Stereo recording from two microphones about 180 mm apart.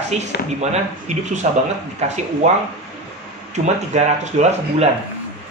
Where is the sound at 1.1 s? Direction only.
40° right (ahead or behind).